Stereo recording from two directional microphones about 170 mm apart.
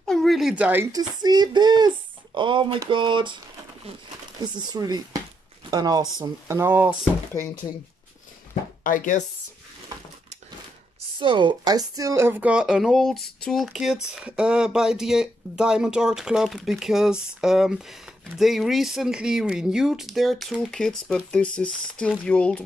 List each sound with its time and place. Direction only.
0.0 s a sound: centre (ahead or behind)
0.9 s speech: 25° right (ahead or behind)
4.6 s speech: 25° right (ahead or behind)
8.8 s speech: 50° left (ahead or behind)
11.1 s speech: 30° right (ahead or behind); by 22.6 s 5° left (ahead or behind)